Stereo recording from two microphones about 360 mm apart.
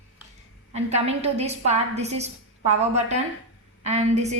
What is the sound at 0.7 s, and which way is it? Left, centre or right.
A woman's voice, centre.